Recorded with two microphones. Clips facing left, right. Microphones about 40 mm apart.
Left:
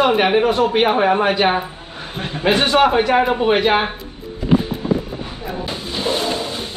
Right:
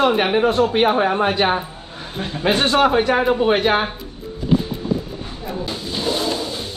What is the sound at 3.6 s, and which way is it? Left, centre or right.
Speech, left.